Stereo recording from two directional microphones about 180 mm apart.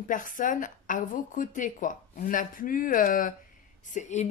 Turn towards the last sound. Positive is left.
turn(degrees=40)  # may be behind; listen again after turning